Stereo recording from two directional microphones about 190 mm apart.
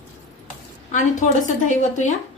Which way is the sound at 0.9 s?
40° left (ahead or behind).